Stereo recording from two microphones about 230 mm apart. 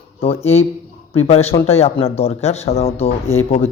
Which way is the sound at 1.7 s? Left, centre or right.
Left.